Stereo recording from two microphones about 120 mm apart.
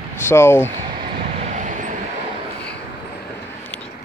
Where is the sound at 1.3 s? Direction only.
80° right.